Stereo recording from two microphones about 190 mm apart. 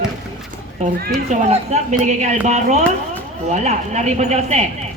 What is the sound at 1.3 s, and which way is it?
Speech, 35° right (ahead or behind).